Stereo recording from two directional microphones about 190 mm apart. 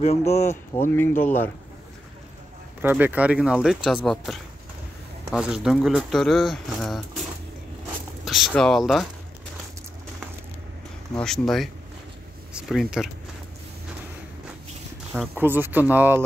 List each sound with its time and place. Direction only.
0.0 s speech: 35° left (ahead or behind)
0.8 s speech: 10° left (ahead or behind)
2.8 s speech: 10° right (ahead or behind)
8.3 s speech: centre (ahead or behind)
11.1 s speech: centre (ahead or behind)
15.1 s speech: 10° right (ahead or behind)